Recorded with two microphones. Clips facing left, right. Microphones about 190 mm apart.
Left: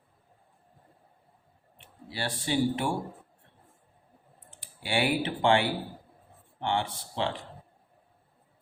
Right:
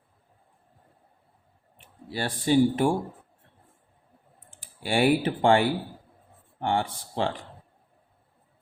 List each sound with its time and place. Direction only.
2.0 s speech: 40° right (ahead or behind)
4.6 s speech: 45° right (ahead or behind)